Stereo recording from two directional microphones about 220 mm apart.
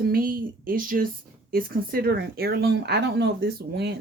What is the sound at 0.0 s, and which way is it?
A woman's voice, 40° right (ahead or behind).